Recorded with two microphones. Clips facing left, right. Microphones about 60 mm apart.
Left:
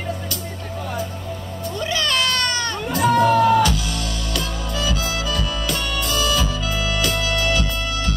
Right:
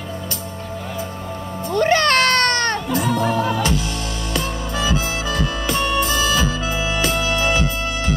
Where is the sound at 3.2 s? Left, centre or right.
Right.